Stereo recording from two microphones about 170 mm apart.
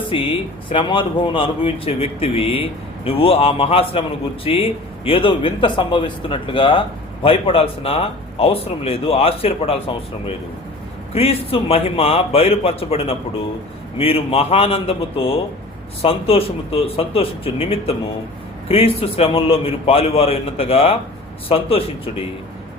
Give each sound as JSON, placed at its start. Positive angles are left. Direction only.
{"t": 0.1, "sound": "speech", "side_deg": 30}
{"t": 11.1, "sound": "speech", "side_deg": 35}